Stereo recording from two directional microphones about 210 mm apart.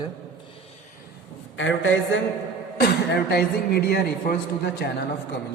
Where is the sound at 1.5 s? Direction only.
65° left (ahead or behind).